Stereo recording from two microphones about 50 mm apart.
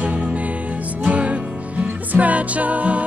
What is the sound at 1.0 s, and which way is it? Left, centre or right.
Music, right.